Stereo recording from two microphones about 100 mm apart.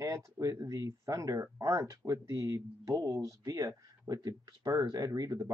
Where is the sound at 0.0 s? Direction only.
35° right (ahead or behind).